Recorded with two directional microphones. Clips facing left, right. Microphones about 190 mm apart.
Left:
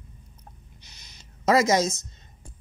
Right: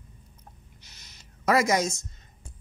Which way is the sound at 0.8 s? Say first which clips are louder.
Left 1 dB; 15° left (ahead or behind).